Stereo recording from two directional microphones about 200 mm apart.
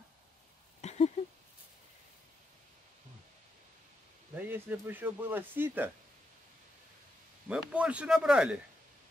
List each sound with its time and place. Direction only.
0.7 s a sound: 35° left (ahead or behind)
4.4 s speech: 10° right (ahead or behind)
7.4 s speech: 5° right (ahead or behind)